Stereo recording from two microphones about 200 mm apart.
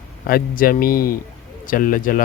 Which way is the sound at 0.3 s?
45° left (ahead or behind).